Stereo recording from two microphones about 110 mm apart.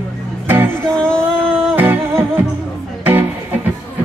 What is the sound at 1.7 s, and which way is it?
Music, 20° right (ahead or behind).